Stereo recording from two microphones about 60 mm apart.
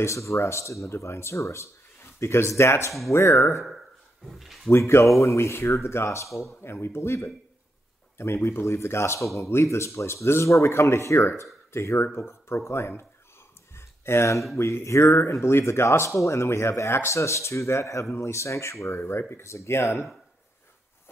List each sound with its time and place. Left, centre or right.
0.0 s speech: left
4.3 s speech: centre
4.6 s speech: left
6.6 s speech: left
13.7 s a sound: left
14.6 s speech: left